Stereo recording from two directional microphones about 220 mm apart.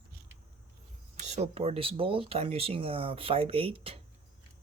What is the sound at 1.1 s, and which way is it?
Speech, 30° right (ahead or behind).